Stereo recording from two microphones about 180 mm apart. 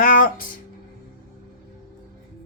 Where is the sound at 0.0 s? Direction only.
50° left (ahead or behind).